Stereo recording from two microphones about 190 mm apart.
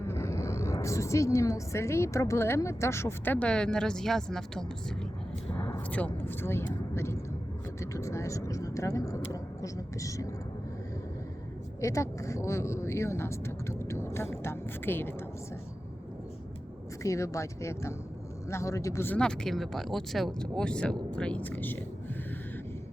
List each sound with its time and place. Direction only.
0.1 s a woman's voice: 15° left (ahead or behind)
5.5 s a sound: 10° left (ahead or behind)
6.2 s a woman's voice: 10° left (ahead or behind)
11.8 s a woman's voice: 15° left (ahead or behind)
17.0 s a woman's voice: 15° left (ahead or behind)